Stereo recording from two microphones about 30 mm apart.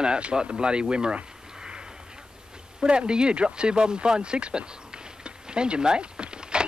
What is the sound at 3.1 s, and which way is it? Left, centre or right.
Speech, right.